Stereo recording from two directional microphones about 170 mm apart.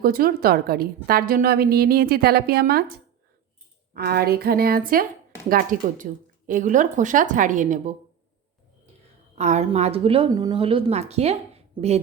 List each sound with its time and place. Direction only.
0.0 s a woman's voice: 60° right (ahead or behind)
3.9 s a woman's voice: 65° right (ahead or behind); by 7.9 s 45° right (ahead or behind)
9.4 s a woman's voice: 40° right (ahead or behind)